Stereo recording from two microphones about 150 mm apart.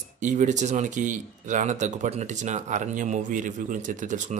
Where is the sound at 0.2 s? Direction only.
55° right (ahead or behind).